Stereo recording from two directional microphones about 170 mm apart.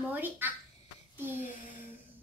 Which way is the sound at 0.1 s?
10° right (ahead or behind).